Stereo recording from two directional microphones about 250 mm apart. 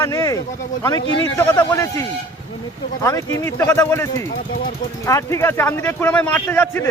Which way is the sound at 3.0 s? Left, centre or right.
Centre.